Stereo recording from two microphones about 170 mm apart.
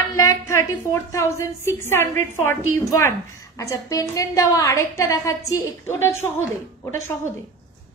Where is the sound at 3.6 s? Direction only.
20° left (ahead or behind).